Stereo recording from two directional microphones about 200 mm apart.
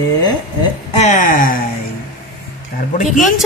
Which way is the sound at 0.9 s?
40° left (ahead or behind).